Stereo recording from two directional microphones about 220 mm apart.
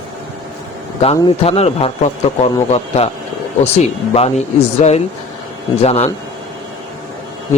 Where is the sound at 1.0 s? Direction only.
25° left (ahead or behind).